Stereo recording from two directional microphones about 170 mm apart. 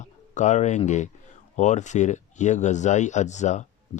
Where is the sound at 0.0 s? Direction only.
45° left (ahead or behind).